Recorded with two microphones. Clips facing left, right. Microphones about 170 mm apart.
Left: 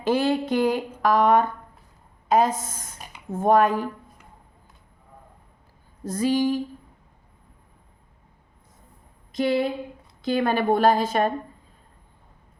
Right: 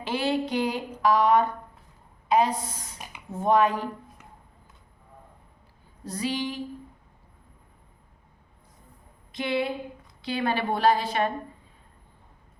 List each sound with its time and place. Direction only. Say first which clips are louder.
0.0 s speech: left 5 dB; 45° left (ahead or behind)
6.1 s speech: left 8 dB; 45° left (ahead or behind)
9.3 s a woman's voice: left 5 dB; 40° left (ahead or behind)